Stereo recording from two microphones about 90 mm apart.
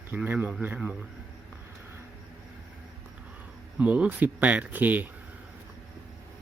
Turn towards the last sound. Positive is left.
turn(degrees=-20)  # may be behind; listen again after turning